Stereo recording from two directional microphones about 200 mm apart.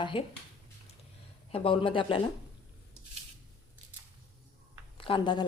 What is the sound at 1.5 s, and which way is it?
Speech, 25° left (ahead or behind).